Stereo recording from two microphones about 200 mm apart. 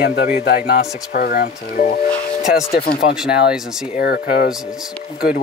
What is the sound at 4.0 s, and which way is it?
Speech, 50° left (ahead or behind).